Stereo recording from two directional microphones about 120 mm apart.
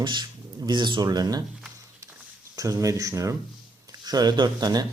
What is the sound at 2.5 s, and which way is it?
Speech, 30° right (ahead or behind).